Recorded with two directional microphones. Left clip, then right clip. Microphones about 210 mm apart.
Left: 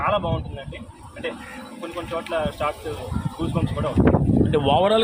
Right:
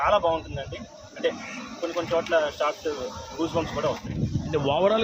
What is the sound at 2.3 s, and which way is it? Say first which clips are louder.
Speech: left 1 dB; 10° right (ahead or behind).